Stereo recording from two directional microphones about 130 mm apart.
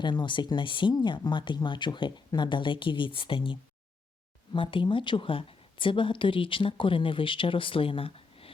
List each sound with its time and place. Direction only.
0.0 s a woman's voice: 35° left (ahead or behind)